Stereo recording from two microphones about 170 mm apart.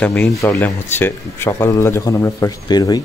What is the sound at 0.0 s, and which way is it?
Speech, 10° left (ahead or behind).